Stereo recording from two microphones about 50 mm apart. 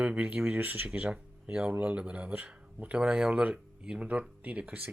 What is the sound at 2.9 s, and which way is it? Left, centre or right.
Speech, centre.